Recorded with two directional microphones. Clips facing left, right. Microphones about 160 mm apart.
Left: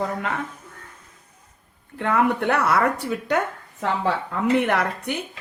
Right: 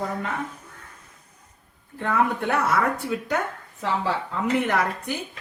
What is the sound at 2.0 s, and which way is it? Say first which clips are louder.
Speech: left 3 dB; 70° left (ahead or behind).